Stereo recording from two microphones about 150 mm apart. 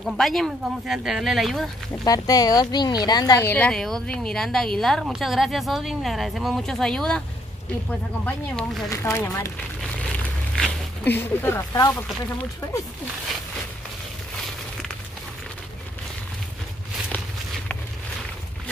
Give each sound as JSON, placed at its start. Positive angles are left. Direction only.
{"t": 0.0, "sound": "speech", "side_deg": 0}
{"t": 2.0, "sound": "speech", "side_deg": 25}
{"t": 8.8, "sound": "speech", "side_deg": 20}
{"t": 9.8, "sound": "a sound", "side_deg": 5}